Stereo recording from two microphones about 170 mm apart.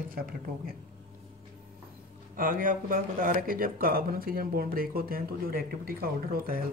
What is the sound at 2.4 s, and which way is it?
Speech, 55° right (ahead or behind).